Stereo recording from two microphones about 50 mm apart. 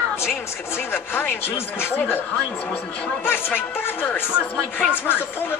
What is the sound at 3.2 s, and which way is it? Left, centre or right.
A woman's voice, left.